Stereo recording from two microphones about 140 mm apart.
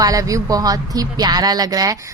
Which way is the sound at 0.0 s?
25° right (ahead or behind).